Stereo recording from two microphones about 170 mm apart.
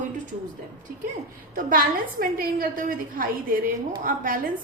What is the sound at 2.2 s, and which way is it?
A woman's voice, 55° right (ahead or behind).